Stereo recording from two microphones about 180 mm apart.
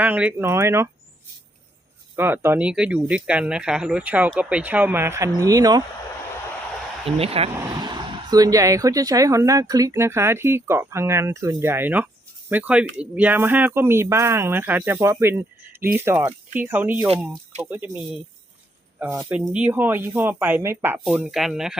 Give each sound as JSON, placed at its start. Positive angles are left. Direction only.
{"t": 0.0, "sound": "speech", "side_deg": -10}
{"t": 2.1, "sound": "speech", "side_deg": -10}
{"t": 7.2, "sound": "speech", "side_deg": -35}
{"t": 8.3, "sound": "speech", "side_deg": -20}